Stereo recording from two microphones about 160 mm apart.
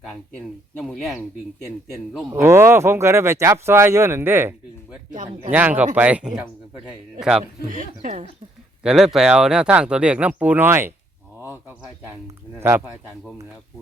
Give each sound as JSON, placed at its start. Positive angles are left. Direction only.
{"t": 0.0, "sound": "speech", "side_deg": 5}
{"t": 2.3, "sound": "speech", "side_deg": -15}
{"t": 5.1, "sound": "speech", "side_deg": -50}
{"t": 5.5, "sound": "speech", "side_deg": -10}
{"t": 7.7, "sound": "speech", "side_deg": -55}
{"t": 8.8, "sound": "speech", "side_deg": -5}
{"t": 12.5, "sound": "speech", "side_deg": -15}